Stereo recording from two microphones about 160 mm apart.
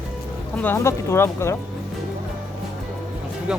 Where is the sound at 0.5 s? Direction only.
10° left (ahead or behind).